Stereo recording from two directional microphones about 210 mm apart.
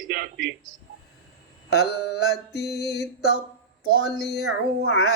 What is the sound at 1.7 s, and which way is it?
Mantra, 50° left (ahead or behind).